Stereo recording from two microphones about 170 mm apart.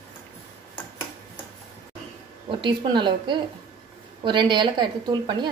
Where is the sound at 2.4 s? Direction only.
30° right (ahead or behind).